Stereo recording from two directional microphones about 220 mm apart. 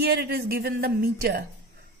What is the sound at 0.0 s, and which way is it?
A woman's voice, 45° right (ahead or behind).